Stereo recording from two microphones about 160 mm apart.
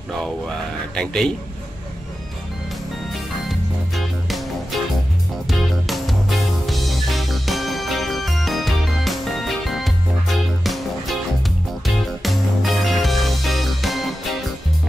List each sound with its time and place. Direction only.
0.2 s speech: 5° left (ahead or behind)
3.4 s music: centre (ahead or behind)
5.5 s music: centre (ahead or behind)